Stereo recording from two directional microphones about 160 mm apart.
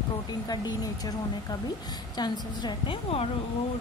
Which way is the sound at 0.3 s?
25° left (ahead or behind).